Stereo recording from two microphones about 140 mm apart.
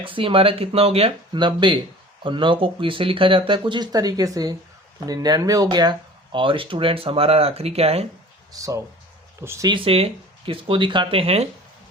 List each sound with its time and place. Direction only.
0.0 s speech: 40° right (ahead or behind)
8.5 s speech: 25° right (ahead or behind)
9.6 s speech: 40° right (ahead or behind)